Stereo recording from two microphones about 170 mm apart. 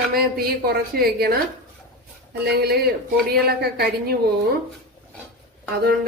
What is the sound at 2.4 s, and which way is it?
A woman's voice, 65° right (ahead or behind).